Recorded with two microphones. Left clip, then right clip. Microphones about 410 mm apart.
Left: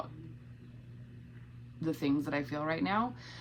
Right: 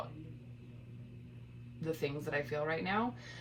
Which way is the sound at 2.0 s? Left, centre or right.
Centre.